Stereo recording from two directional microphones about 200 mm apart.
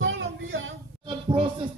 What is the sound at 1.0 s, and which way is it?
Speech, 25° right (ahead or behind).